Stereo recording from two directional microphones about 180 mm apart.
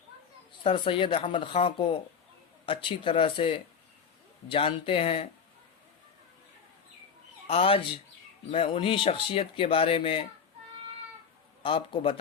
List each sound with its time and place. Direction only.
0.6 s speech: 30° left (ahead or behind)
7.4 s speech: 30° left (ahead or behind)
11.6 s speech: 30° left (ahead or behind)